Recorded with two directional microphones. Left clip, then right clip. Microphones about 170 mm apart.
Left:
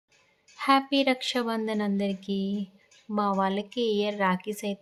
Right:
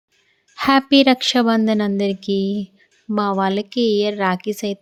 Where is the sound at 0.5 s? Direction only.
45° right (ahead or behind).